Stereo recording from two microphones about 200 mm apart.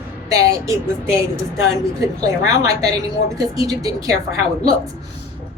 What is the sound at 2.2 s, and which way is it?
A woman's voice, 20° right (ahead or behind).